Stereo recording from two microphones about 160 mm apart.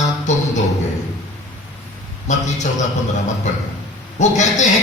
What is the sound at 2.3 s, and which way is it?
Speech, 45° left (ahead or behind).